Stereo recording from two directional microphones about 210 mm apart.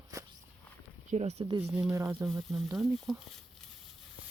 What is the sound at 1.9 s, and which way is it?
Speech, 15° right (ahead or behind).